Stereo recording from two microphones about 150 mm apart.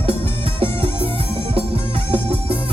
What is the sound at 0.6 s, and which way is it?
Music, 40° right (ahead or behind).